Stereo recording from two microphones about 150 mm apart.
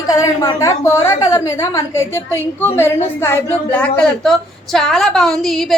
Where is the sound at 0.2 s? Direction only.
20° left (ahead or behind).